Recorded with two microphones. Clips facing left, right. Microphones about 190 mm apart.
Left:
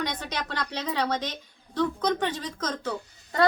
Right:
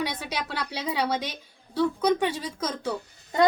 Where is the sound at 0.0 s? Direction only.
10° right (ahead or behind).